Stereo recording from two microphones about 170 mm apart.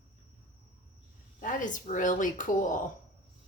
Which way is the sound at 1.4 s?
50° left (ahead or behind).